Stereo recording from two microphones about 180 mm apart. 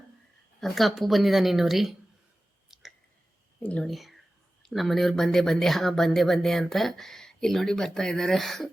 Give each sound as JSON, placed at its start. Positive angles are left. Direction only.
{"t": 0.6, "sound": "speech", "side_deg": 0}
{"t": 2.7, "sound": "a sound", "side_deg": 0}
{"t": 3.6, "sound": "speech", "side_deg": 5}